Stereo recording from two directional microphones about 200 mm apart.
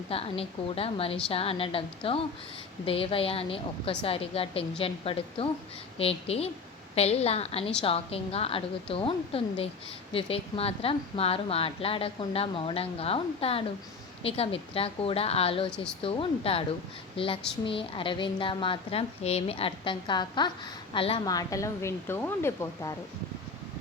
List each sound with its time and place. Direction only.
0.1 s a woman's voice: 30° left (ahead or behind)
15.7 s speech: 5° left (ahead or behind)
16.0 s a woman's voice: 25° left (ahead or behind)